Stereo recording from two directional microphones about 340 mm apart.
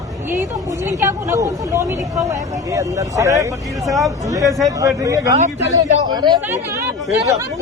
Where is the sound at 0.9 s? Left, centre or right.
Centre.